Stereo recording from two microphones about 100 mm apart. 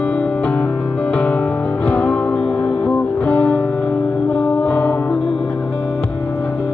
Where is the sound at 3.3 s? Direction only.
15° left (ahead or behind).